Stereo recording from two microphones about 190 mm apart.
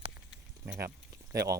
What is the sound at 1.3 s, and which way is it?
Speech, 20° right (ahead or behind).